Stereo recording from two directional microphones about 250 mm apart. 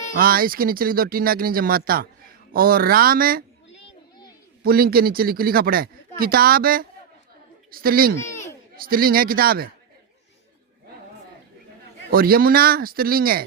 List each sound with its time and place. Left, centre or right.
0.2 s speech: right
3.7 s children playing: left
4.6 s speech: right
8.1 s a sound: centre
8.7 s speech: right
12.1 s speech: right